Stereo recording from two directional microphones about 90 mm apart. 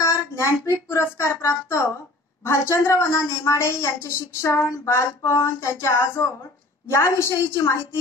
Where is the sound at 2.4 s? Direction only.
30° left (ahead or behind).